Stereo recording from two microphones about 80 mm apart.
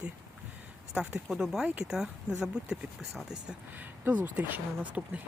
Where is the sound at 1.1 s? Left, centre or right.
Centre.